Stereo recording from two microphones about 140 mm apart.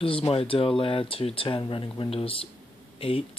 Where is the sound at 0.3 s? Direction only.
40° left (ahead or behind).